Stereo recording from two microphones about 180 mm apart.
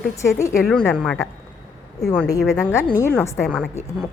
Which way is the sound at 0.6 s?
5° left (ahead or behind).